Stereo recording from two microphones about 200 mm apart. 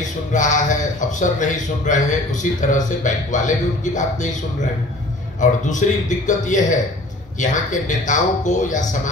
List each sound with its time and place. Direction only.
0.3 s speech: 40° left (ahead or behind)
5.4 s speech: 40° left (ahead or behind)